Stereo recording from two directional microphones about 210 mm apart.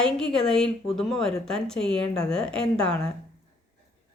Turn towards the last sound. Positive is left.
turn(degrees=5)  # may be behind; listen again after turning